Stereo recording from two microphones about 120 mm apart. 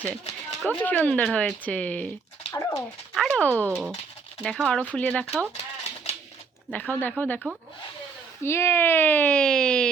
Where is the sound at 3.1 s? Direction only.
5° left (ahead or behind).